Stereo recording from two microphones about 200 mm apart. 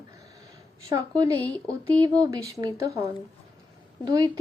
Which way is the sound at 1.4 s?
5° left (ahead or behind).